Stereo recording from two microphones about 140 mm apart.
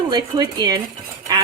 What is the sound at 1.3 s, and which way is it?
Duck, 30° right (ahead or behind).